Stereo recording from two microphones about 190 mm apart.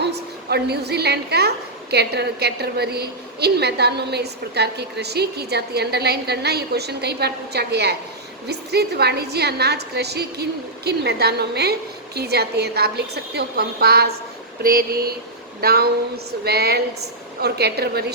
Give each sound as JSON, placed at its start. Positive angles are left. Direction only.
{"t": 0.0, "sound": "a woman's voice", "side_deg": -60}
{"t": 14.6, "sound": "a sound", "side_deg": -50}
{"t": 15.6, "sound": "a woman's voice", "side_deg": -55}